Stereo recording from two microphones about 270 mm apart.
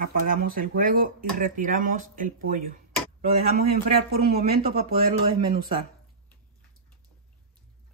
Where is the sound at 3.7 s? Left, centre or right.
Right.